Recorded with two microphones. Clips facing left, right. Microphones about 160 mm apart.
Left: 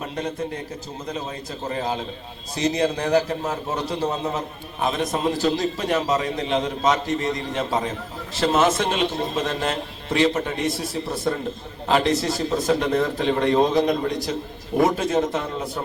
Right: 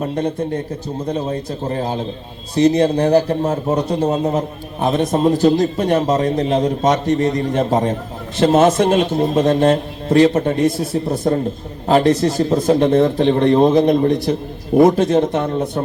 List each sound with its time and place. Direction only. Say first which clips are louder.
0.0 s a man's voice: right 8 dB; 35° right (ahead or behind)
2.6 s a man's voice: right 10 dB; 55° right (ahead or behind)
3.1 s a man's voice: right 6 dB; 40° right (ahead or behind)
13.5 s a man's voice: right 6 dB; 45° right (ahead or behind)